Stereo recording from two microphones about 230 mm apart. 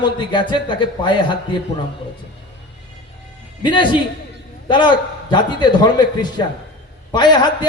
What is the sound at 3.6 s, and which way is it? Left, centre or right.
A man's voice, left.